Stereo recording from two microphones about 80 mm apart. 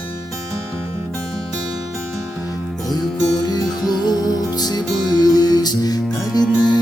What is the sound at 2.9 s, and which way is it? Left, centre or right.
Music, left.